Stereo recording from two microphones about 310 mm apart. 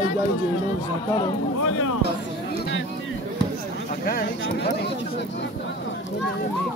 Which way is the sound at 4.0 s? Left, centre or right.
Left.